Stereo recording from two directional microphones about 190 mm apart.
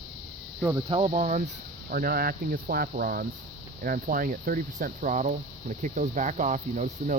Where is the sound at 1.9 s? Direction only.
50° right (ahead or behind).